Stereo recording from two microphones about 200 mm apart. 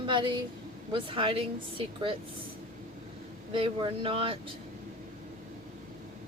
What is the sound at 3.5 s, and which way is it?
Speech, 25° right (ahead or behind).